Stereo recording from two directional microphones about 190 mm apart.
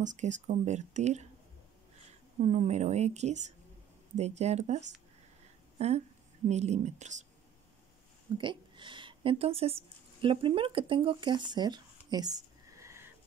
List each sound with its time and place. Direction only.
0.0 s speech: 40° right (ahead or behind)
2.4 s speech: 35° right (ahead or behind)
8.4 s a woman's voice: 25° right (ahead or behind)